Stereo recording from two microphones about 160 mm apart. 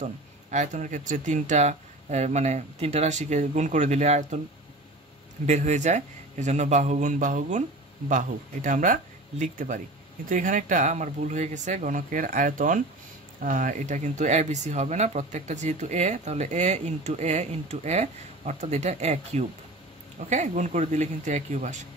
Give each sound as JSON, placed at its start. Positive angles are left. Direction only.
{"t": 0.0, "sound": "speech", "side_deg": -50}
{"t": 5.5, "sound": "speech", "side_deg": -45}